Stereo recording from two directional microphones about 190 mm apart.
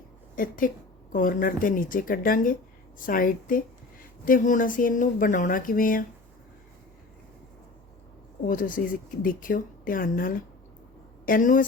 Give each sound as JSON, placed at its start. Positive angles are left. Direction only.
{"t": 0.3, "sound": "speech", "side_deg": 45}
{"t": 8.4, "sound": "speech", "side_deg": 45}